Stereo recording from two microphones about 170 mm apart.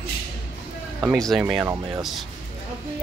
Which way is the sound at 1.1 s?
5° left (ahead or behind).